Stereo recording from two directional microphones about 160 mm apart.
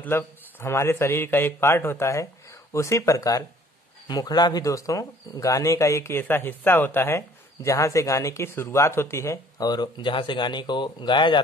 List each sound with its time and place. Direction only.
0.0 s a man's voice: 15° left (ahead or behind); by 11.4 s 30° left (ahead or behind)